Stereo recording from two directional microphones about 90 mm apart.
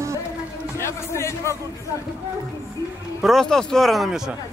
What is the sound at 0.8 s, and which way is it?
Speech, 30° left (ahead or behind).